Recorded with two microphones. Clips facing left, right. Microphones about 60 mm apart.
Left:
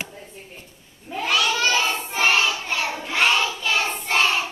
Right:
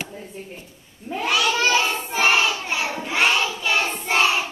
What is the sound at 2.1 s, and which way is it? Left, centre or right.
Child singing, centre.